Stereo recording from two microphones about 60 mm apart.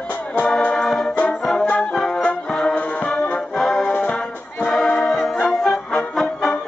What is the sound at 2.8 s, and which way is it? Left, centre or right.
Music, centre.